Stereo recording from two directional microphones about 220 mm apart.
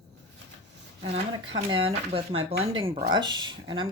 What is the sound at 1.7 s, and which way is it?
A woman's voice, 25° right (ahead or behind).